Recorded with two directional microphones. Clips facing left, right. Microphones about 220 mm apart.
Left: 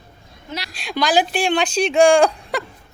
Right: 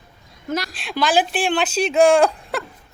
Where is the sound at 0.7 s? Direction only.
Centre (ahead or behind).